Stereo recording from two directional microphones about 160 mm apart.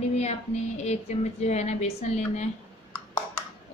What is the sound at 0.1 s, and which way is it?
Speech, 45° left (ahead or behind).